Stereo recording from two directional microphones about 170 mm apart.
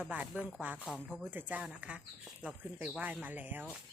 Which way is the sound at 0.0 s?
10° right (ahead or behind).